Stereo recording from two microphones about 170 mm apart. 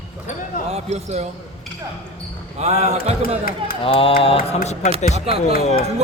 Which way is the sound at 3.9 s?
35° left (ahead or behind).